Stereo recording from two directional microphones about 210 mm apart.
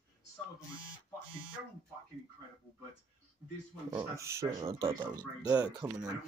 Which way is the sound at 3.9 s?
15° right (ahead or behind).